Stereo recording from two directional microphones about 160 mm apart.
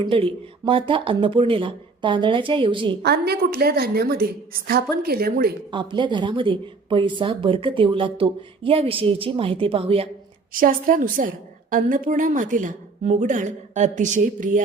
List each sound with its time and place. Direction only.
0.0 s a woman's voice: 35° right (ahead or behind)
3.0 s a woman's voice: 90° right; by 5.5 s 70° right (ahead or behind)
5.7 s a woman's voice: 30° right (ahead or behind)
10.5 s a woman's voice: 60° right (ahead or behind)